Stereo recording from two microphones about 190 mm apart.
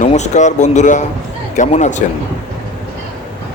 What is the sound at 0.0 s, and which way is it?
Speech, 40° left (ahead or behind).